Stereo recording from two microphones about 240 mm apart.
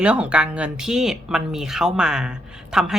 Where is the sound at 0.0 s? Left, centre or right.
Centre.